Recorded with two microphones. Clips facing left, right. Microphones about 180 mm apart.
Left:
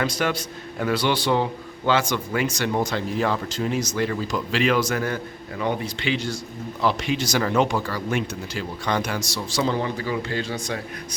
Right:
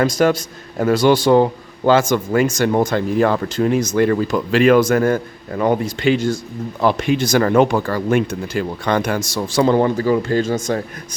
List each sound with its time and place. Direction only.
0.0 s a man's voice: 45° right (ahead or behind)